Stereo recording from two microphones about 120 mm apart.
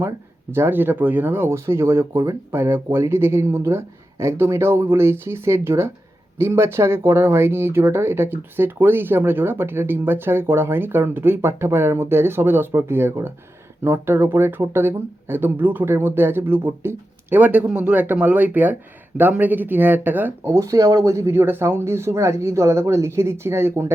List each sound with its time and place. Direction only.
0.5 s speech: 20° right (ahead or behind)